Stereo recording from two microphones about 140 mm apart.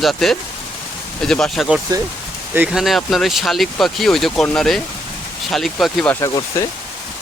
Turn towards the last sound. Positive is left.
turn(degrees=20)  # may be behind; listen again after turning